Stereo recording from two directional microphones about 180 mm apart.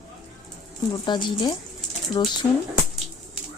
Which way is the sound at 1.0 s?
25° left (ahead or behind).